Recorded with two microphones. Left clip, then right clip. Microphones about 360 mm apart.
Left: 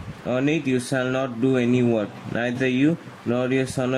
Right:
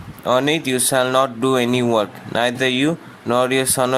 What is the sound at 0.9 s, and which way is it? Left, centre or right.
Speech, right.